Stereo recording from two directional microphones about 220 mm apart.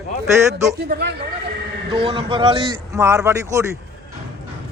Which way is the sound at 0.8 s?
45° right (ahead or behind).